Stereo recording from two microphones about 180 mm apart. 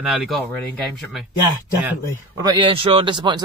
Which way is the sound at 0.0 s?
Centre (ahead or behind).